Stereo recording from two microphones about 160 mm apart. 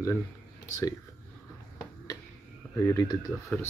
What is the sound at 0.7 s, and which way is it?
Speech, 20° left (ahead or behind).